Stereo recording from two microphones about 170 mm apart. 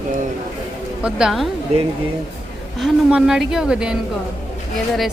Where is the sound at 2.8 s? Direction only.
5° right (ahead or behind).